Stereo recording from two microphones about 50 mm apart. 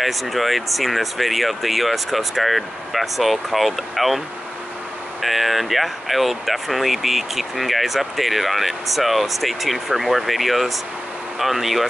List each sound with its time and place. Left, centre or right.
0.0 s speech: centre
5.2 s speech: centre